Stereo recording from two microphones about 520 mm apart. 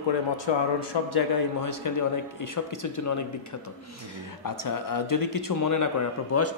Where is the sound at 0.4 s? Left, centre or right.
Left.